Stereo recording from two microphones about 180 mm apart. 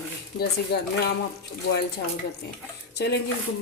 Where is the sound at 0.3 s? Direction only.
65° left (ahead or behind).